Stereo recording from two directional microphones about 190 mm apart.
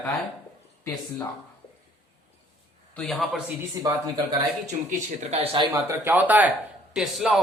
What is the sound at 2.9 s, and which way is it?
Speech, centre (ahead or behind).